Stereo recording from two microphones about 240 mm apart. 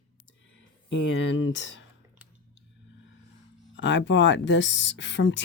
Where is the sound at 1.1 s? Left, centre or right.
Left.